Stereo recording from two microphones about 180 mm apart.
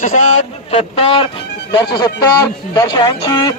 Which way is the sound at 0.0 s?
45° left (ahead or behind).